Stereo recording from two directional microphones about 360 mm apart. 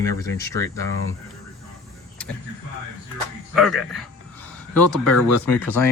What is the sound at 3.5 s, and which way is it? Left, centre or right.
Speech, centre.